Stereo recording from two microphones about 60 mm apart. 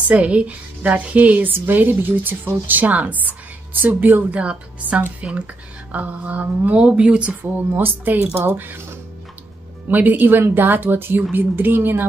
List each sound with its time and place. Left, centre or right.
0.1 s speech: right
7.7 s speech: right